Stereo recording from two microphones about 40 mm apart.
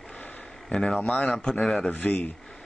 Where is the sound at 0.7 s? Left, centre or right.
Centre.